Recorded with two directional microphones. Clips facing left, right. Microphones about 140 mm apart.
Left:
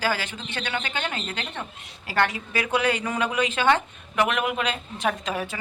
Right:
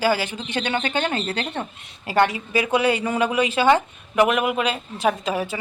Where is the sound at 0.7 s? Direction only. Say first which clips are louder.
Right 6 dB; 30° right (ahead or behind).